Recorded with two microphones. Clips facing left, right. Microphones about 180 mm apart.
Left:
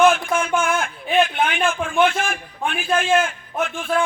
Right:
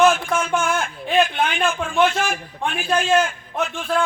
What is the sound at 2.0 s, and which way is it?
Speech, 50° left (ahead or behind).